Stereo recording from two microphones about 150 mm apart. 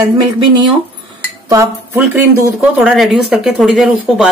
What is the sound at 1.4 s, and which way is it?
Speech, 20° right (ahead or behind).